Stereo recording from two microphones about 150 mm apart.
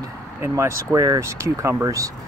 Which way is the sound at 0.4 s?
20° right (ahead or behind).